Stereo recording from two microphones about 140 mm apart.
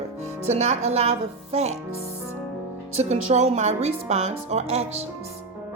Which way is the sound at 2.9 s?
50° right (ahead or behind).